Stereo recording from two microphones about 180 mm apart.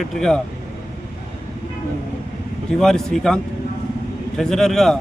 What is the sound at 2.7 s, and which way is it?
Speech, centre (ahead or behind).